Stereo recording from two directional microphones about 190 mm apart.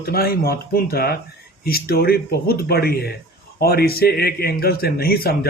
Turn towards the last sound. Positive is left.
turn(degrees=55)  # may be behind; listen again after turning